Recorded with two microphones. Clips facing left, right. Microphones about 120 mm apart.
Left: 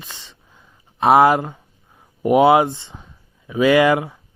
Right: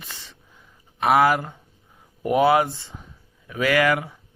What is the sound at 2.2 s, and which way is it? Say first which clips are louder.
Speech: left 5 dB; 20° left (ahead or behind).